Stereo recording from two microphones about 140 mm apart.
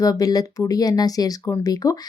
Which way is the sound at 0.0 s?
25° left (ahead or behind).